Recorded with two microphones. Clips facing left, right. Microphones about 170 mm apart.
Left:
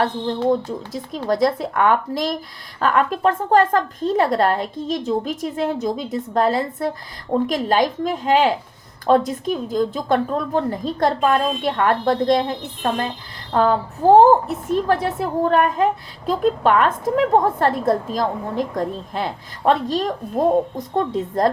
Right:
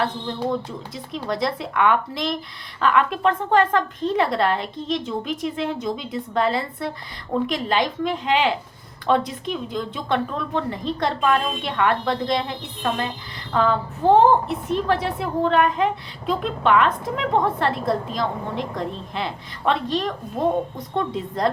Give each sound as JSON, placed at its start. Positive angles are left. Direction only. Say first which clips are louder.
{"t": 0.9, "sound": "a woman's voice", "louder": "left 6 dB", "side_deg": 45}